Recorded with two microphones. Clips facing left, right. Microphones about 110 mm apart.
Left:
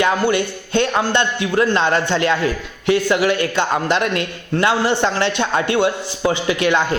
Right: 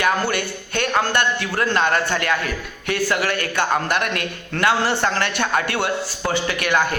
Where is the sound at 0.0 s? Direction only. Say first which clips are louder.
Left 4 dB; 25° left (ahead or behind).